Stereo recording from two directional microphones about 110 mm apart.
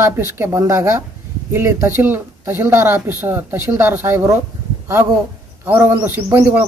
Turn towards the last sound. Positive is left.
turn(degrees=-25)  # may be behind; listen again after turning